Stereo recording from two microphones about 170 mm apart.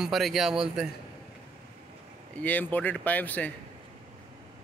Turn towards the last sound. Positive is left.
turn(degrees=10)  # may be behind; listen again after turning